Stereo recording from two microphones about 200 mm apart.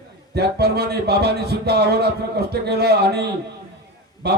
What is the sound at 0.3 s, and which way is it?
Speech, 55° right (ahead or behind).